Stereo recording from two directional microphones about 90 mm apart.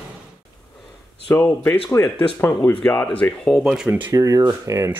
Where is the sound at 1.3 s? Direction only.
25° left (ahead or behind).